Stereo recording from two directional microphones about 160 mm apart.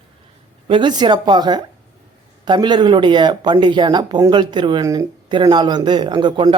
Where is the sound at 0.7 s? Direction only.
30° right (ahead or behind).